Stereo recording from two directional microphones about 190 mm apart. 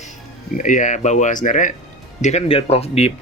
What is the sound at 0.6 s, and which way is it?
A woman's voice, 40° left (ahead or behind).